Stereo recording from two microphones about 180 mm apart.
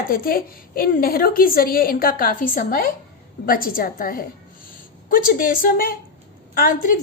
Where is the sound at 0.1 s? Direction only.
55° left (ahead or behind).